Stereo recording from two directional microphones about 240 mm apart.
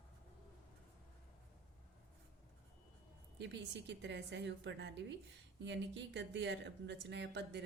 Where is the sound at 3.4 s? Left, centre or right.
Right.